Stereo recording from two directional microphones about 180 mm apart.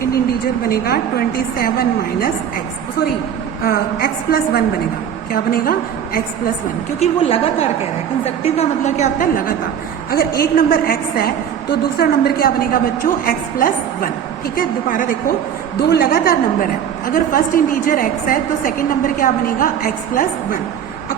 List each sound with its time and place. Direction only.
0.4 s a woman's voice: 60° left (ahead or behind)
3.6 s a woman's voice: 60° left (ahead or behind)
7.0 s a woman's voice: 35° left (ahead or behind)